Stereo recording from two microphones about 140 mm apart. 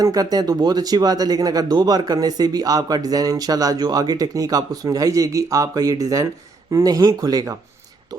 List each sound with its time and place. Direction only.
0.0 s speech: 25° right (ahead or behind)